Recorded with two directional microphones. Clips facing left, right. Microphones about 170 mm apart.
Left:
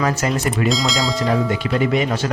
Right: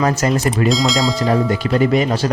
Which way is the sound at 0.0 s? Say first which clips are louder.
Right 3 dB; 35° right (ahead or behind).